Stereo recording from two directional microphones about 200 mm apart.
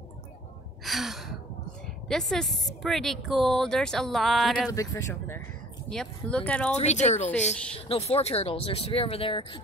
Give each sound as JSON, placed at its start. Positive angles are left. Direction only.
{"t": 0.8, "sound": "gasp", "side_deg": 0}
{"t": 2.0, "sound": "speech", "side_deg": 0}
{"t": 4.6, "sound": "speech", "side_deg": 15}
{"t": 6.8, "sound": "speech", "side_deg": 35}
{"t": 7.5, "sound": "speech", "side_deg": 5}
{"t": 7.9, "sound": "speech", "side_deg": 30}